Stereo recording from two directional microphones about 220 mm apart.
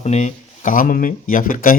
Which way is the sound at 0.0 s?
30° left (ahead or behind).